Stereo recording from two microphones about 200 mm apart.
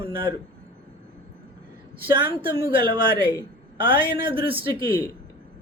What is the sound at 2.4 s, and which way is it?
A man's voice, 25° right (ahead or behind).